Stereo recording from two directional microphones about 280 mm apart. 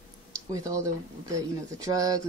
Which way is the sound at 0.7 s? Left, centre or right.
Centre.